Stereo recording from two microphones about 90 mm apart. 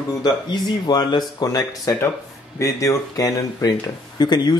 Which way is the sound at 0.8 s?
50° left (ahead or behind).